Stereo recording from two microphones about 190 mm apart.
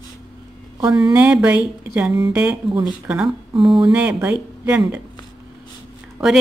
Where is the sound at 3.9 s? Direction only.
10° right (ahead or behind).